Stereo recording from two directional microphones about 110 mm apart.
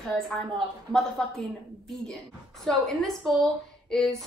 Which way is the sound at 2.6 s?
5° left (ahead or behind).